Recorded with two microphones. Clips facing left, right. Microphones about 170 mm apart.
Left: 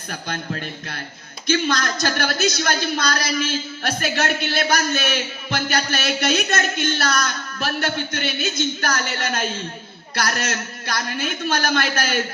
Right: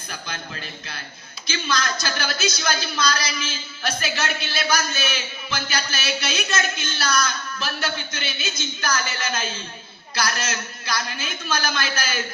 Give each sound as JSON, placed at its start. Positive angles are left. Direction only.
{"t": 0.1, "sound": "speech", "side_deg": 50}
{"t": 3.5, "sound": "a man's voice", "side_deg": 60}
{"t": 10.4, "sound": "a man's voice", "side_deg": 55}